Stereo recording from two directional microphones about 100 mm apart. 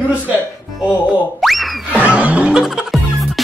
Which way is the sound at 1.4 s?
Centre (ahead or behind).